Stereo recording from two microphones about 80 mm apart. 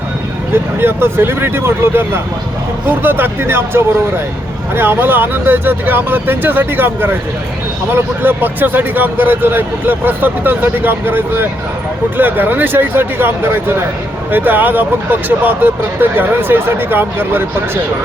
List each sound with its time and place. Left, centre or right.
0.5 s speech: right